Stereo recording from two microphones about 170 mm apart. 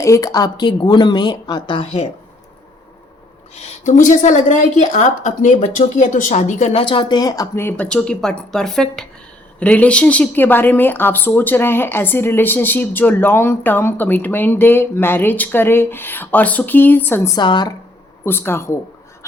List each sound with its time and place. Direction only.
0.0 s speech: 20° left (ahead or behind); by 2.0 s 35° left (ahead or behind)
3.5 s a woman's voice: 45° left (ahead or behind)
6.8 s speech: 30° left (ahead or behind); by 17.3 s 10° left (ahead or behind)
17.3 s speech: 25° left (ahead or behind)
18.3 s speech: 15° left (ahead or behind)